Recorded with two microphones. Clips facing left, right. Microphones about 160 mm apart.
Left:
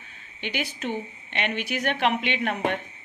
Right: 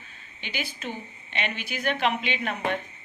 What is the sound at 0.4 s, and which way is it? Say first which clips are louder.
Speech: left 4 dB; 65° left (ahead or behind).